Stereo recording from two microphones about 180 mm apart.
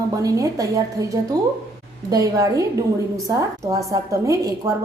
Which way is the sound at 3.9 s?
20° right (ahead or behind).